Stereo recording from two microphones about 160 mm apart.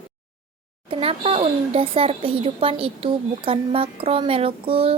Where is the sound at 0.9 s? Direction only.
35° right (ahead or behind).